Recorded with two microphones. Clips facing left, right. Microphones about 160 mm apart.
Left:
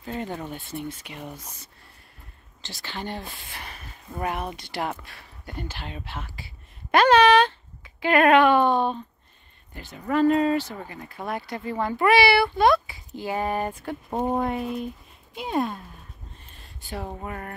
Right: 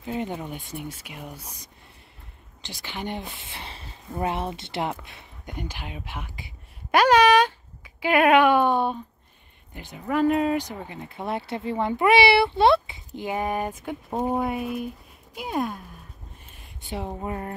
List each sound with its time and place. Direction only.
0.0 s speech: 15° right (ahead or behind)
16.5 s a sound: 25° right (ahead or behind)
17.1 s speech: 20° right (ahead or behind)